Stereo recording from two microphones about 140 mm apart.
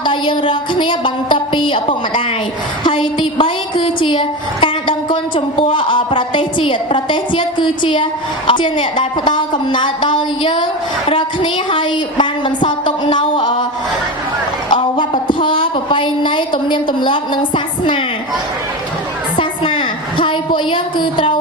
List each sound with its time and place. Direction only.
0.0 s a woman's voice: 35° left (ahead or behind)
14.7 s a woman's voice: 35° left (ahead or behind)
19.4 s a sound: 35° left (ahead or behind)